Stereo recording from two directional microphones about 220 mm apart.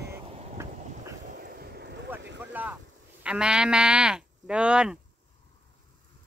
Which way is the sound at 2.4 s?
10° right (ahead or behind).